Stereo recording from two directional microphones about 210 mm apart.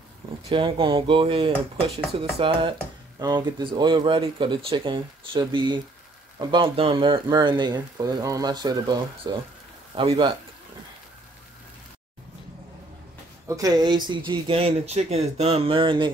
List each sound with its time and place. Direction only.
0.4 s speech: 25° right (ahead or behind)
13.5 s speech: 15° right (ahead or behind)